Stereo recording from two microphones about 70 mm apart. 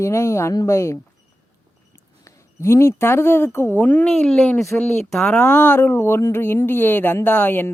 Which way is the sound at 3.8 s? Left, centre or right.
Left.